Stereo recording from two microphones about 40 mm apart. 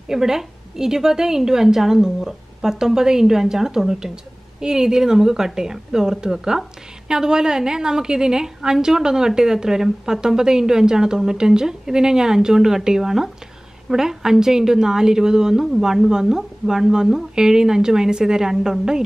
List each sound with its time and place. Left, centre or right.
0.1 s a woman's voice: centre